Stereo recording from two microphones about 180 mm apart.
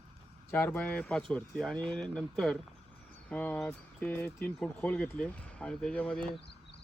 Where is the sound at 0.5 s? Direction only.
5° left (ahead or behind).